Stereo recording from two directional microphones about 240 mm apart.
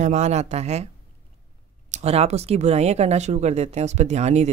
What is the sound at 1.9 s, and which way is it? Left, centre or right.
Speech, right.